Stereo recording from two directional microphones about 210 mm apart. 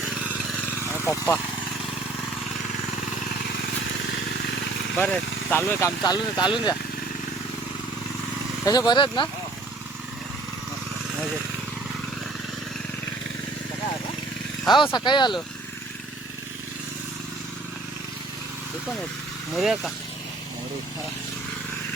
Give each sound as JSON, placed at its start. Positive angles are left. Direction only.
{"t": 0.3, "sound": "vehicle", "side_deg": -5}
{"t": 0.9, "sound": "vehicle", "side_deg": 10}
{"t": 4.9, "sound": "speech", "side_deg": 10}
{"t": 8.6, "sound": "speech", "side_deg": 20}
{"t": 14.8, "sound": "speech", "side_deg": 20}
{"t": 19.5, "sound": "speech", "side_deg": 0}